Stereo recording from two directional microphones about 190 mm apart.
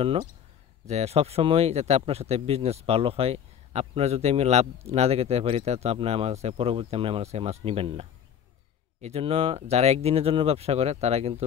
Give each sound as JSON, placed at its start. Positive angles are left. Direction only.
{"t": 0.8, "sound": "speech", "side_deg": -35}